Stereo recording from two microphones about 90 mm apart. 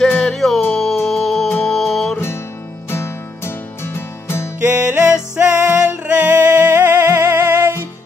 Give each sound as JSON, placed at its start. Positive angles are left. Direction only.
{"t": 0.2, "sound": "music", "side_deg": 0}
{"t": 2.1, "sound": "music", "side_deg": 30}
{"t": 4.7, "sound": "music", "side_deg": -15}